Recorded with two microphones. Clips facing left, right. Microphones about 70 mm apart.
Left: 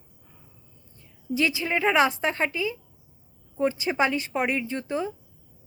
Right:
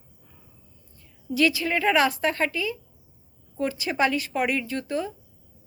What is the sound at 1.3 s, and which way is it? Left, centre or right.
A woman's voice, left.